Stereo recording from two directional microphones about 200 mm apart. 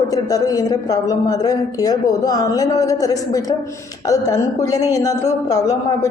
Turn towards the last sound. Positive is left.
turn(degrees=20)  # may be behind; listen again after turning